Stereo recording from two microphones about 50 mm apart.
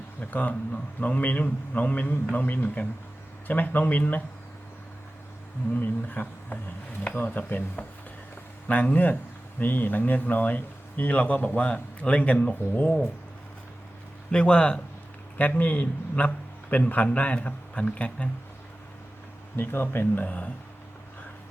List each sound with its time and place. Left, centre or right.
0.2 s speech: left
5.7 s speech: left
14.3 s a man's voice: left
15.4 s a man's voice: left
19.5 s speech: left